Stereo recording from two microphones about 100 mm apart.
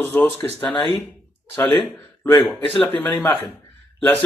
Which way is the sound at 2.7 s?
15° left (ahead or behind).